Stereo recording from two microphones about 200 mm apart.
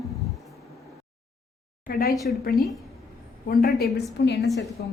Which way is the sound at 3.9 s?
55° left (ahead or behind).